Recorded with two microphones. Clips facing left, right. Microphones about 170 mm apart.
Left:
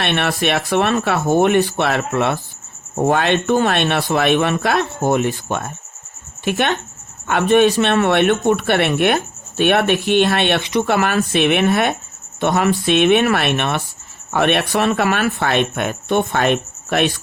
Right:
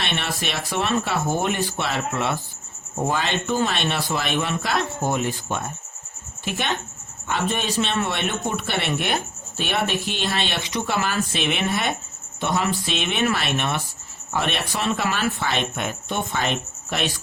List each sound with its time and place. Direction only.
0.0 s speech: 65° left (ahead or behind)